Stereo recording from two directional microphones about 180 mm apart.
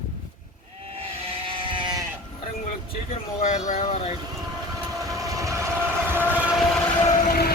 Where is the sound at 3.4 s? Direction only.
40° left (ahead or behind).